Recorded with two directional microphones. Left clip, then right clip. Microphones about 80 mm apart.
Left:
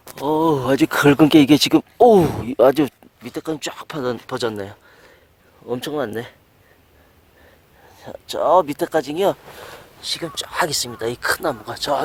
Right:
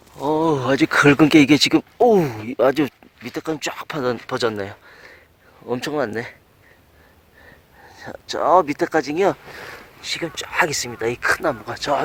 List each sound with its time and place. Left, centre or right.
0.3 s a sound: left
0.9 s speech: left
2.0 s speech: left
3.2 s speech: centre
6.1 s speech: left
7.9 s a sound: centre
8.1 s speech: centre